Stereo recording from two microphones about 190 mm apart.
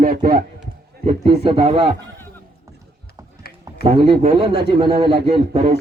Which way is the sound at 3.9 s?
30° right (ahead or behind).